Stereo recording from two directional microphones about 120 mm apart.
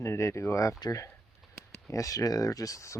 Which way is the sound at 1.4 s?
Centre (ahead or behind).